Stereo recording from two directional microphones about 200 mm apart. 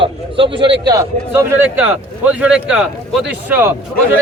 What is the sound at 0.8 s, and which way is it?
A man's voice, 15° right (ahead or behind).